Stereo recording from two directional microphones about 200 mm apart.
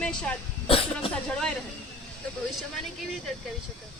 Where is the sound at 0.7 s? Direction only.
30° left (ahead or behind).